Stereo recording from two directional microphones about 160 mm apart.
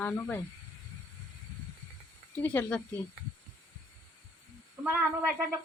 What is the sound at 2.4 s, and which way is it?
Speech, 10° left (ahead or behind).